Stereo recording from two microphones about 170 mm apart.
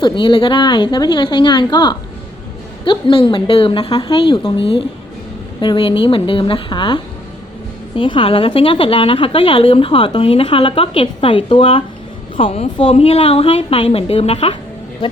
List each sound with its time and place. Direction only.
0.0 s a woman's voice: 30° left (ahead or behind)